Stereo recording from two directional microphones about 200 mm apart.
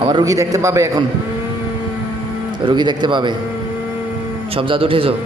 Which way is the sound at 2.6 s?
20° right (ahead or behind).